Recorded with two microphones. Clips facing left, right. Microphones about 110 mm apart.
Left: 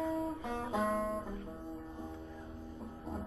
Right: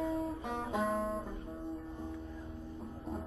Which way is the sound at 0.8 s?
30° right (ahead or behind).